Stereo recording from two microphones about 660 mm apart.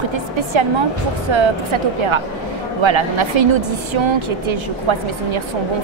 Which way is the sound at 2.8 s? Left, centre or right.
Right.